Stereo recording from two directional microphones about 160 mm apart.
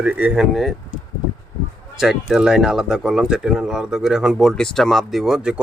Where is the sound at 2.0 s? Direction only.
5° right (ahead or behind).